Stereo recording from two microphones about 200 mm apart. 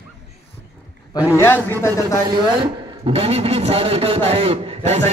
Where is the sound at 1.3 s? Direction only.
10° left (ahead or behind).